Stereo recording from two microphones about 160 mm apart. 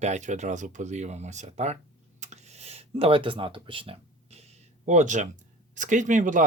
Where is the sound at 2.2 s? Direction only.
45° right (ahead or behind).